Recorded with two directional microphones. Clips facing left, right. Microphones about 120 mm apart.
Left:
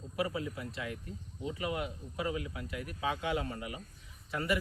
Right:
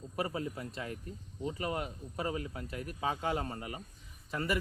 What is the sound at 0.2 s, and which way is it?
Speech, 40° right (ahead or behind).